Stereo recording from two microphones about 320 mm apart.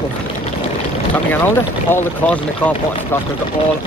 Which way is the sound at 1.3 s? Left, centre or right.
Centre.